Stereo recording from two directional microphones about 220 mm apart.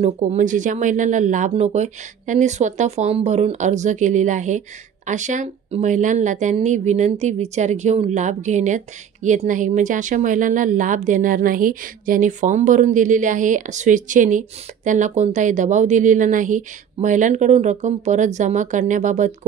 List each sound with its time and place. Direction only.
0.0 s speech: 30° right (ahead or behind)